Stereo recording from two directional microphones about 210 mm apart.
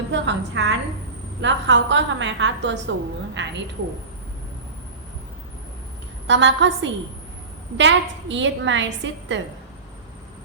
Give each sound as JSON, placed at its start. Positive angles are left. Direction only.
{"t": 0.1, "sound": "a woman's voice", "side_deg": -60}
{"t": 6.2, "sound": "a woman's voice", "side_deg": -60}